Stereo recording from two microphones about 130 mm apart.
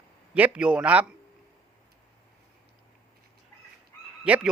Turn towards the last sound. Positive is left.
turn(degrees=-10)  # may be behind; listen again after turning